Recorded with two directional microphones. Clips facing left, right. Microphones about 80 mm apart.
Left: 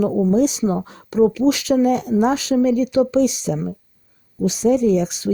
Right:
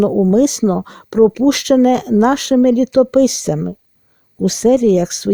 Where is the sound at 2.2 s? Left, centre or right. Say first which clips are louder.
Right 5 dB; right.